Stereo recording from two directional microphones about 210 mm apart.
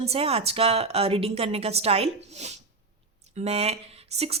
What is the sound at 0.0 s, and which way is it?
A woman's voice, 30° right (ahead or behind).